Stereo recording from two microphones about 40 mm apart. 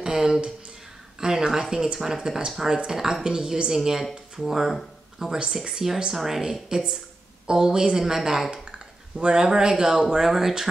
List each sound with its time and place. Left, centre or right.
0.0 s speech: centre
6.1 s a woman's voice: centre
8.7 s speech: right
10.0 s speech: centre